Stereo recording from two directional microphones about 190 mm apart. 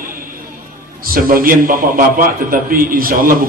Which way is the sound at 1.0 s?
50° right (ahead or behind).